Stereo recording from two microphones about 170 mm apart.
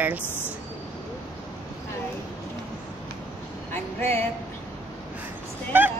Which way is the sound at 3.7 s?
15° left (ahead or behind).